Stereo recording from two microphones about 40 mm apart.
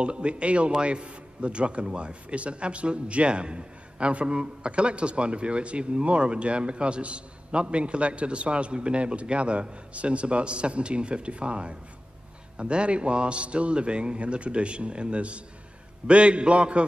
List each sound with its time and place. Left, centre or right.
0.0 s a man's voice: right